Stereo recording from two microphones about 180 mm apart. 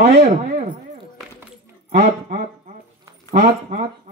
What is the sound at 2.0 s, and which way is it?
A man's voice, 40° right (ahead or behind).